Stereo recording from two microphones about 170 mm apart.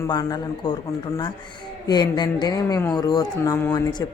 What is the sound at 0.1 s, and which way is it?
A woman's voice, 25° left (ahead or behind).